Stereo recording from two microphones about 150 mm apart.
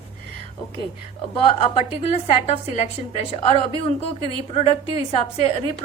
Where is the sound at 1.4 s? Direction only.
40° left (ahead or behind).